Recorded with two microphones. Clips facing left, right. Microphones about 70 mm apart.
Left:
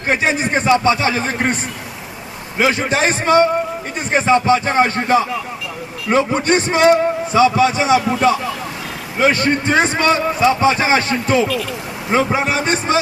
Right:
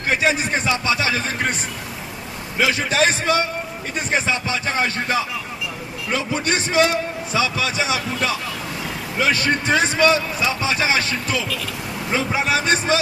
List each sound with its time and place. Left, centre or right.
0.3 s a man's voice: left
2.6 s a man's voice: left